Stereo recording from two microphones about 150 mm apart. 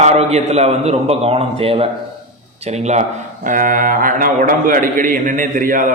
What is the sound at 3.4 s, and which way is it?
A man's voice, 60° right (ahead or behind).